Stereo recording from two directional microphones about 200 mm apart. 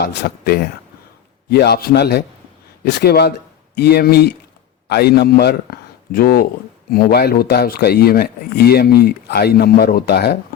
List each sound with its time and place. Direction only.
0.0 s speech: 55° left (ahead or behind)